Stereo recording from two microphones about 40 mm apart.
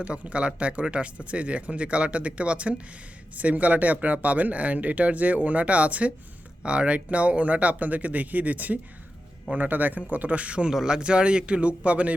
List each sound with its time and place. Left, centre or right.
0.0 s speech: right
10.7 s a man's voice: centre; by 12.1 s right